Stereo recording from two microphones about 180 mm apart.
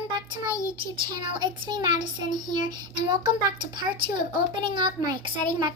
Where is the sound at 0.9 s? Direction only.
25° right (ahead or behind).